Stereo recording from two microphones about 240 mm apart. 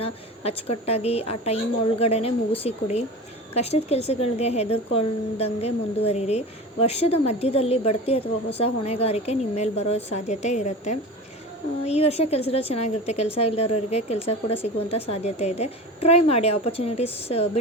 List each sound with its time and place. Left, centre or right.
0.0 s a woman's voice: left